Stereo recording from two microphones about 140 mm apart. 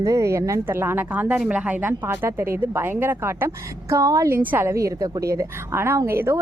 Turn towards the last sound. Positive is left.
turn(degrees=-15)  # may be behind; listen again after turning